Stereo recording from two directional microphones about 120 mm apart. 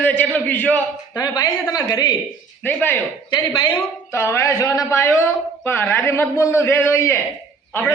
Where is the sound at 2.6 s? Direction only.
15° left (ahead or behind).